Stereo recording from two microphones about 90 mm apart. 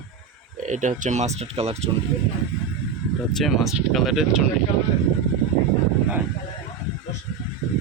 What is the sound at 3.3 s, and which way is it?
Speech, centre (ahead or behind).